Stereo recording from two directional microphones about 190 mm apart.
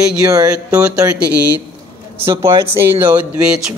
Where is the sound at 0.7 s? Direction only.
5° right (ahead or behind).